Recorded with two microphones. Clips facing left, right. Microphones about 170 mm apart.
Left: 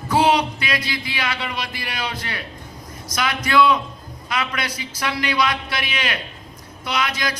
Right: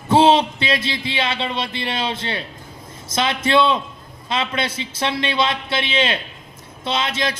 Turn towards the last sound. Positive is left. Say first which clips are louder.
# right 2 dB
turn(degrees=-25)  # may be behind; listen again after turning